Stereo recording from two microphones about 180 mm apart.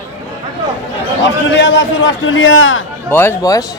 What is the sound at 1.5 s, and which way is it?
A man's voice, 90° left.